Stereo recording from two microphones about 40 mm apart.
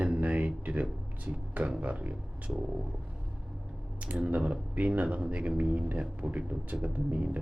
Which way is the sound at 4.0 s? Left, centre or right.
Right.